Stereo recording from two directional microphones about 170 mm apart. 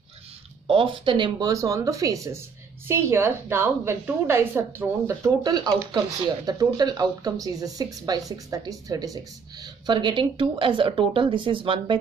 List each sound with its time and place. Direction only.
0.7 s a woman's voice: 30° right (ahead or behind)